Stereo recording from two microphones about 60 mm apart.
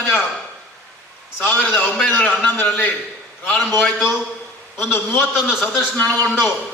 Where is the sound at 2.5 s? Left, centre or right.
Left.